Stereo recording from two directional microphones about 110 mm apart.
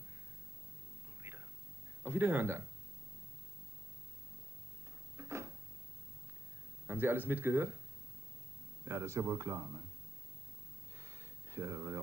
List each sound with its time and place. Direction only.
1.2 s hum: 25° right (ahead or behind)
2.0 s speech: 20° right (ahead or behind)
5.1 s cupboard open or close: 25° right (ahead or behind)
6.9 s speech: 20° right (ahead or behind)
8.8 s speech: 25° right (ahead or behind)
11.0 s a sound: 25° right (ahead or behind)